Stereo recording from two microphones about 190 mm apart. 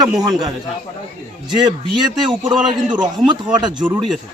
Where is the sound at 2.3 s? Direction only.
25° right (ahead or behind).